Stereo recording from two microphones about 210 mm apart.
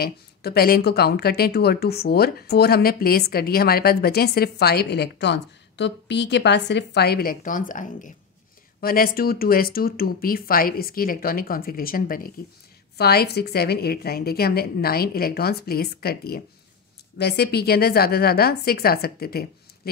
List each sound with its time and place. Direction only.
0.0 s speech: 50° left (ahead or behind)